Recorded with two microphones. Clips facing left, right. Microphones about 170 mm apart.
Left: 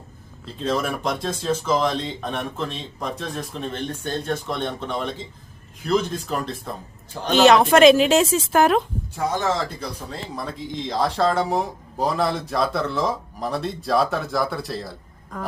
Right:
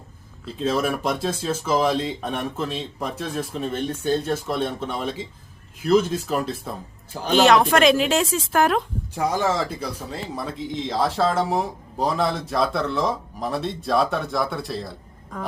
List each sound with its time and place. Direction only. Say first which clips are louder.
0.4 s speech: right 1 dB; 5° right (ahead or behind)
7.4 s speech: left 4 dB; 20° left (ahead or behind)
10.1 s speech: right 1 dB; 5° right (ahead or behind)